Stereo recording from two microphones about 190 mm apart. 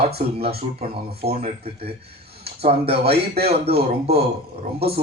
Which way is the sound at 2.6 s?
30° right (ahead or behind).